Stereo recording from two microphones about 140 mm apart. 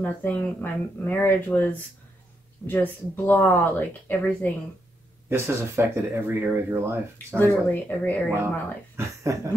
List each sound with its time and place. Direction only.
0.0 s speech: 10° left (ahead or behind)
5.3 s speech: 15° right (ahead or behind)
7.3 s speech: 15° left (ahead or behind)
8.9 s speech: 20° right (ahead or behind)